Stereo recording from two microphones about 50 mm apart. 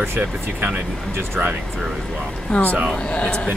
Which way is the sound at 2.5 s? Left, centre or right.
Left.